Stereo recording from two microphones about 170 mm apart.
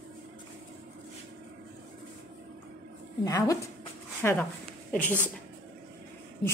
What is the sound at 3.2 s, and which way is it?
A woman's voice, 20° left (ahead or behind).